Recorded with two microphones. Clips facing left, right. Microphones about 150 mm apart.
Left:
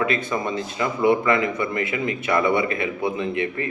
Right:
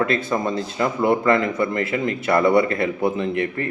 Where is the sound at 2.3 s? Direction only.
40° right (ahead or behind).